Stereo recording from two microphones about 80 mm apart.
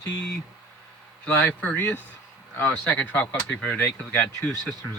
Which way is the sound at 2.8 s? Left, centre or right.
Centre.